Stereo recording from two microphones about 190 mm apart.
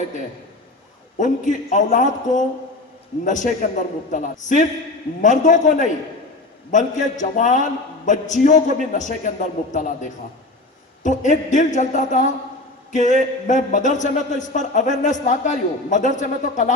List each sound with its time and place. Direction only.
1.2 s speech: 40° left (ahead or behind)